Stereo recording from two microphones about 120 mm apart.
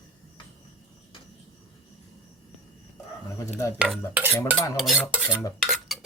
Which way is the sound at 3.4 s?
25° left (ahead or behind).